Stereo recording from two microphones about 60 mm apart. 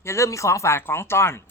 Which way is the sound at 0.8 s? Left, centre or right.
Left.